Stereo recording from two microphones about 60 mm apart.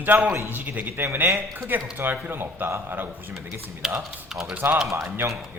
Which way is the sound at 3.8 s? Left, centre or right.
Centre.